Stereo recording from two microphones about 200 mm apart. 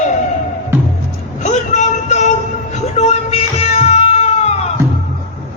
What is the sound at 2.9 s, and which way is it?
Music, 35° left (ahead or behind).